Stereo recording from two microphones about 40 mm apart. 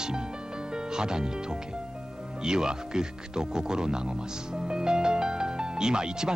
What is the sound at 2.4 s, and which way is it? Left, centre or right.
Speech, centre.